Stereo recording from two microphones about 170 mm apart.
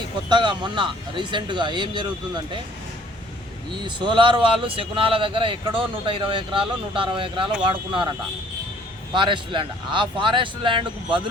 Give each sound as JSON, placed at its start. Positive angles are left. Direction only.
{"t": 0.3, "sound": "speech", "side_deg": -25}
{"t": 3.7, "sound": "speech", "side_deg": -25}
{"t": 9.1, "sound": "speech", "side_deg": -30}